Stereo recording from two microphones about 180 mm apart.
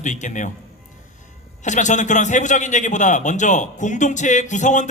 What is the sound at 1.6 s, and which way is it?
A man's voice, 45° left (ahead or behind).